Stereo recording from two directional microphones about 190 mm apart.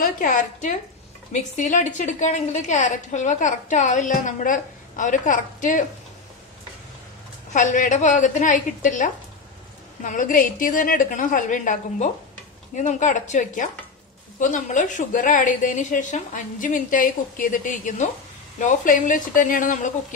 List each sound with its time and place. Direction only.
0.0 s a woman's voice: 45° left (ahead or behind)
7.5 s a woman's voice: 45° left (ahead or behind)